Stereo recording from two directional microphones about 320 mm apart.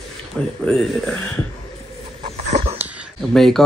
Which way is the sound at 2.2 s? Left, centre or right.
Centre.